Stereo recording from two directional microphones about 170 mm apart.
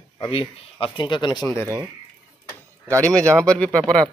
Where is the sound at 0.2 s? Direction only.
30° left (ahead or behind).